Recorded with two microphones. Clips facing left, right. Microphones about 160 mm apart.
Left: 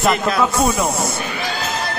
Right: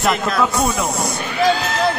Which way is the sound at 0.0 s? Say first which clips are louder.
Left 1 dB; centre (ahead or behind).